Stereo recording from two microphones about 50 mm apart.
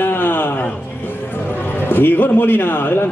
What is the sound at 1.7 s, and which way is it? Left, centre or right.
Speech, left.